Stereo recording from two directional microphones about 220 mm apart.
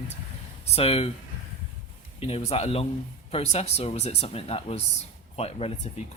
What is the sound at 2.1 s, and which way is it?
Speech, 25° left (ahead or behind).